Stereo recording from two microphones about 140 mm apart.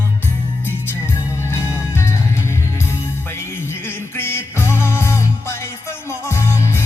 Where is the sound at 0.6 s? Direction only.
15° left (ahead or behind).